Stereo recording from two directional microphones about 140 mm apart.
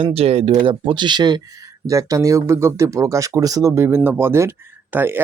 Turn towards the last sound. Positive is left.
turn(degrees=-15)  # may be behind; listen again after turning